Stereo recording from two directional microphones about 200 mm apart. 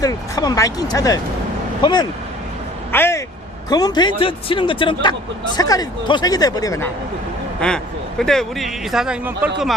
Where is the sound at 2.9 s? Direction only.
10° left (ahead or behind).